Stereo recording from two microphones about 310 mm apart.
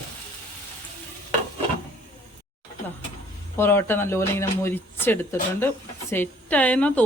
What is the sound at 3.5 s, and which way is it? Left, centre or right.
A woman's voice, centre.